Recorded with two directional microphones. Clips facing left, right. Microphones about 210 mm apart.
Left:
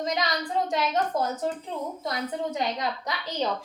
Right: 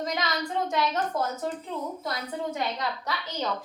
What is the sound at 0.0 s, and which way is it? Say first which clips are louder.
A woman's voice: left 2 dB; 20° left (ahead or behind).